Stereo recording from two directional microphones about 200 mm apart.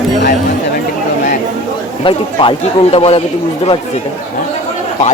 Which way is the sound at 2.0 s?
25° left (ahead or behind).